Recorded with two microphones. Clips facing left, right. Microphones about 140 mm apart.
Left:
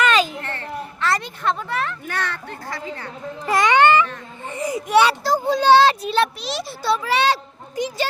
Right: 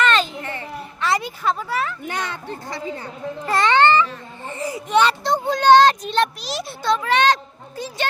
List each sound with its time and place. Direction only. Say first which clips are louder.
0.0 s a sound: left 1 dB; 10° left (ahead or behind)
0.4 s a sound: left 1 dB; 10° right (ahead or behind)
2.0 s a child's voice: even; 15° right (ahead or behind)
3.4 s speech: left 1 dB; 15° left (ahead or behind)
4.4 s baby cry: left 3 dB; 20° left (ahead or behind)
4.9 s a child's voice: left 1 dB; 10° left (ahead or behind)